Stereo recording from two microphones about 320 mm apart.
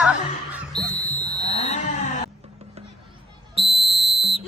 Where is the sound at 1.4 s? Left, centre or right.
Centre.